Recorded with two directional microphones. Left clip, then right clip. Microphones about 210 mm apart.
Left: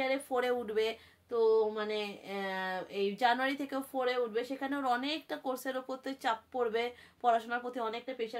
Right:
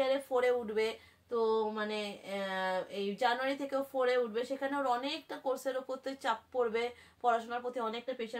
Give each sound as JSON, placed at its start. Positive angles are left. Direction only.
{"t": 0.0, "sound": "speech", "side_deg": 30}